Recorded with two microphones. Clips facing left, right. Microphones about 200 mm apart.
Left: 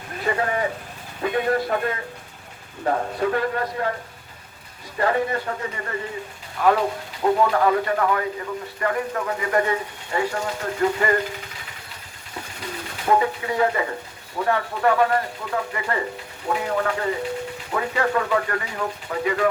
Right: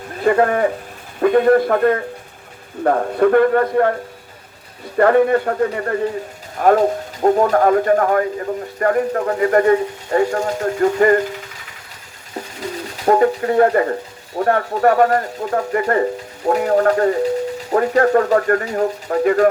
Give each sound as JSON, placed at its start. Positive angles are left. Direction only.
{"t": 0.3, "sound": "a man's voice", "side_deg": -55}
{"t": 4.9, "sound": "speech", "side_deg": -55}
{"t": 13.1, "sound": "speech", "side_deg": -45}